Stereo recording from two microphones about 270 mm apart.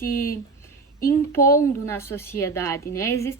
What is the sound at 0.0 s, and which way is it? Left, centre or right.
A woman's voice, centre.